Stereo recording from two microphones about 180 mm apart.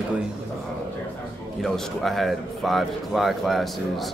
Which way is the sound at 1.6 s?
Centre (ahead or behind).